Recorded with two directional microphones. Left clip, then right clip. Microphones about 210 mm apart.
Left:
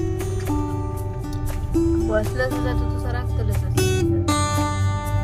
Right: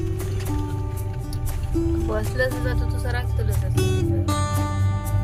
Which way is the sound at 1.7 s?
Centre (ahead or behind).